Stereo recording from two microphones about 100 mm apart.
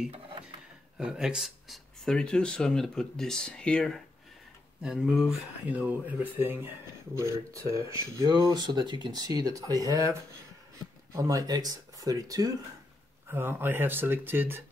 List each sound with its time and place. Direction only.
0.9 s speech: 5° right (ahead or behind)
4.8 s speech: 5° right (ahead or behind); by 10.1 s 35° right (ahead or behind)
11.1 s speech: 35° right (ahead or behind)
13.3 s speech: 25° right (ahead or behind)